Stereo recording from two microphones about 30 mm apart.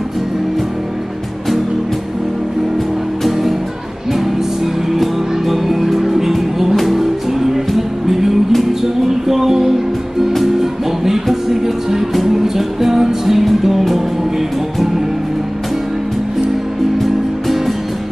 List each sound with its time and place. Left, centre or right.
4.9 s music: centre
17.0 s music: centre